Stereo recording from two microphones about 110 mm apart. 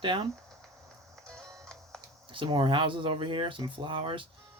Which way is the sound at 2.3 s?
50° right (ahead or behind).